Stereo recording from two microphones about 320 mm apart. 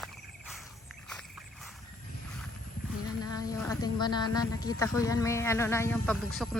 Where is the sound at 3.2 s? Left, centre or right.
Centre.